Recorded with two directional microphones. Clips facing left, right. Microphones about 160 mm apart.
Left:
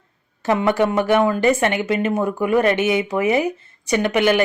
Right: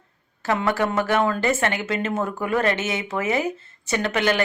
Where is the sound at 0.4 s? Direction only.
15° left (ahead or behind).